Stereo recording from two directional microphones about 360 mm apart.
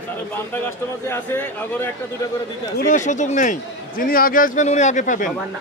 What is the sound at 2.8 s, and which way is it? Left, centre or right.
A man's voice, left.